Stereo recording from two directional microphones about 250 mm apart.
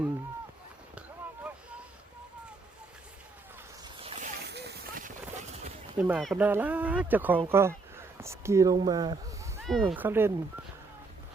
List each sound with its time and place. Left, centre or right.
4.0 s a sound: right
5.3 s clip-clop: right
6.0 s speech: centre
9.6 s speech: centre